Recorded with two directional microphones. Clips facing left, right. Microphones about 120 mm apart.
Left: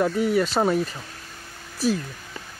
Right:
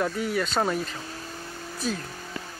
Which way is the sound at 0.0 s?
5° left (ahead or behind).